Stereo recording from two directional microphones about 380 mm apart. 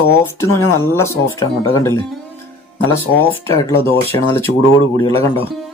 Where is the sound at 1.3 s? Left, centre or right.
Left.